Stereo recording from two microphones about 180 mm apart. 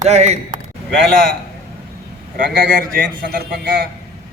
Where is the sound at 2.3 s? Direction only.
50° right (ahead or behind).